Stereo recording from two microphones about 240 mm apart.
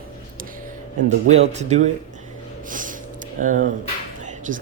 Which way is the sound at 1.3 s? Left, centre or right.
Right.